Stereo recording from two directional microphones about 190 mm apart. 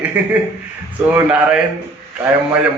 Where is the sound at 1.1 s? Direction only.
10° right (ahead or behind).